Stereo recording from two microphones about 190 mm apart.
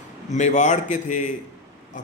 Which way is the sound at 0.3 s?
40° left (ahead or behind).